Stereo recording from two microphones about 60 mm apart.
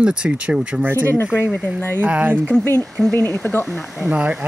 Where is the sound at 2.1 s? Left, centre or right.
Right.